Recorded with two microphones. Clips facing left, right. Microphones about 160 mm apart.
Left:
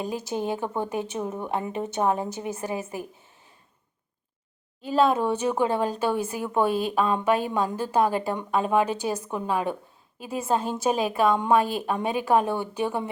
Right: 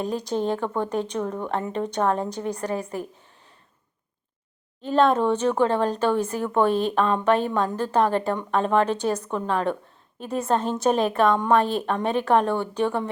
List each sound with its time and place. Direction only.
0.3 s speech: 10° left (ahead or behind)
4.8 s speech: 5° left (ahead or behind)